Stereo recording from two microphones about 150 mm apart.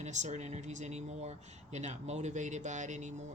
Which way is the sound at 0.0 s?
50° right (ahead or behind).